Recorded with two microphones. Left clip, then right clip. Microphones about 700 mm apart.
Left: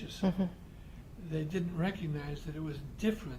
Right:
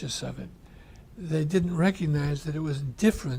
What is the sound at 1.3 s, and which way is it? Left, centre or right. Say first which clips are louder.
A man's voice: right 10 dB; right.